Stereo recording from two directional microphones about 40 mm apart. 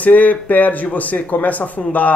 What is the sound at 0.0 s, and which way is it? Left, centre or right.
Speech, left.